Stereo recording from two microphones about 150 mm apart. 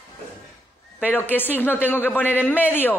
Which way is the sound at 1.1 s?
10° left (ahead or behind).